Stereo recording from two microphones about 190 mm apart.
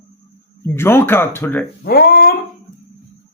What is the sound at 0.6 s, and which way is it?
Speech, 10° left (ahead or behind).